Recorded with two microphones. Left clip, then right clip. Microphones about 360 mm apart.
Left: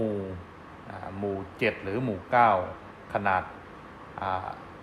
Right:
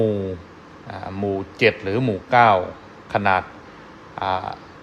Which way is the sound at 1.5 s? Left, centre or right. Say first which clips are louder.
Right 11 dB; right.